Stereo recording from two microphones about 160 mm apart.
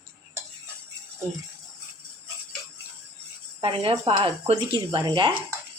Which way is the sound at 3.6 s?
35° right (ahead or behind).